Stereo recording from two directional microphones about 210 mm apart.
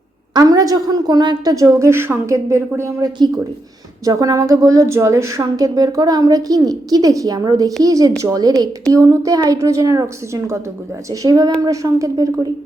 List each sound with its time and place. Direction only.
0.3 s a woman's voice: 15° right (ahead or behind)